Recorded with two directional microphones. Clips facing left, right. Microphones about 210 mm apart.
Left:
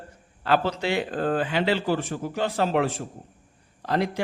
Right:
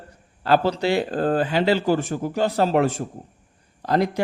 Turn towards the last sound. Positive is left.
turn(degrees=-40)  # may be behind; listen again after turning